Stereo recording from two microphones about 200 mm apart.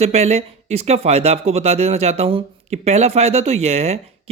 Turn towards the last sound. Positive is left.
turn(degrees=-30)  # may be behind; listen again after turning